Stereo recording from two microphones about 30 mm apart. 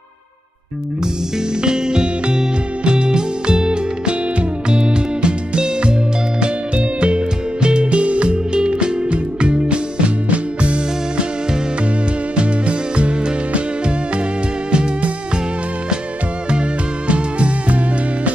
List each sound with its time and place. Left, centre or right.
1.6 s music: right
8.5 s music: right
12.4 s music: right
14.7 s music: right
17.1 s music: right